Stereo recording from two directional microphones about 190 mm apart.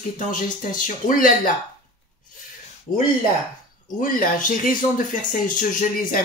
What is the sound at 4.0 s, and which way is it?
Speech, 45° left (ahead or behind).